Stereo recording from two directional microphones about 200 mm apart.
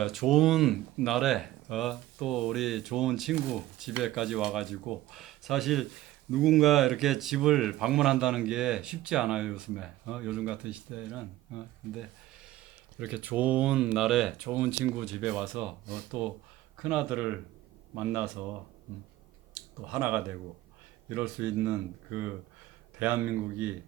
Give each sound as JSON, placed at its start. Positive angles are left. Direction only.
{"t": 0.0, "sound": "speech", "side_deg": 0}
{"t": 19.9, "sound": "speech", "side_deg": -5}